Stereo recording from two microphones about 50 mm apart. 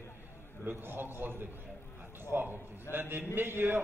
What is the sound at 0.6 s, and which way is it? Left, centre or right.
A man's voice, right.